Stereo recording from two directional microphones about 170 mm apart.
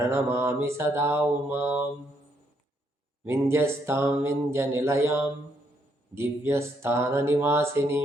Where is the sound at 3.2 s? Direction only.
15° right (ahead or behind).